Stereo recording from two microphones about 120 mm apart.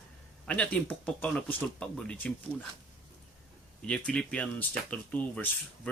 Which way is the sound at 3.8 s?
10° left (ahead or behind).